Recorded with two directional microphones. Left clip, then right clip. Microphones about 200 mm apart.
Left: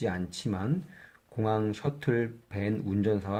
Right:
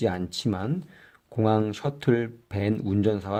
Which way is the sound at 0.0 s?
50° right (ahead or behind).